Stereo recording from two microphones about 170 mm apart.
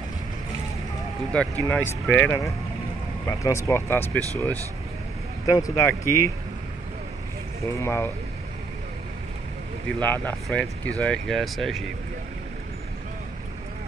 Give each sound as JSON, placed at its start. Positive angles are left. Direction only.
{"t": 1.3, "sound": "speech", "side_deg": 10}
{"t": 5.6, "sound": "speech", "side_deg": 20}
{"t": 7.6, "sound": "speech", "side_deg": 15}
{"t": 9.9, "sound": "speech", "side_deg": 10}